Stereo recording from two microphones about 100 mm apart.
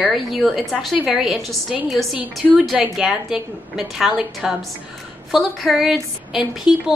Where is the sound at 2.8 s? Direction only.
5° right (ahead or behind).